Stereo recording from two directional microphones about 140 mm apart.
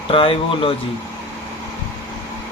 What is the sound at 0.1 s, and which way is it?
Speech, 40° left (ahead or behind).